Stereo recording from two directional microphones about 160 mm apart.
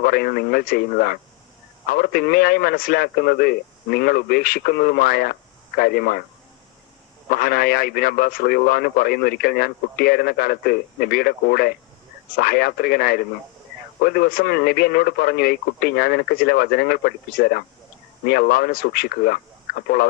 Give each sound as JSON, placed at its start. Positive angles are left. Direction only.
{"t": 0.0, "sound": "speech", "side_deg": 70}
{"t": 7.3, "sound": "speech", "side_deg": 70}